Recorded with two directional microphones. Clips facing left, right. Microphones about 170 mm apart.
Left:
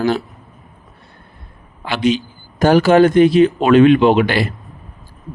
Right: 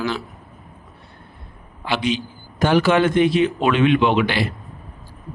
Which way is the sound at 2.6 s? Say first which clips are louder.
Left 6 dB; 40° left (ahead or behind).